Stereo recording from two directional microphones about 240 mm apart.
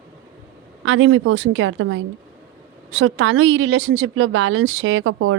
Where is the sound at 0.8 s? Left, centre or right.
Right.